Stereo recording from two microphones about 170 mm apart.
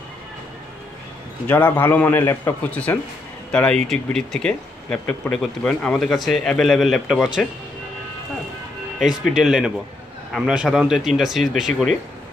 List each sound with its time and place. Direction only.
1.5 s a man's voice: 15° left (ahead or behind); by 7.4 s 5° right (ahead or behind)
9.0 s speech: 5° right (ahead or behind)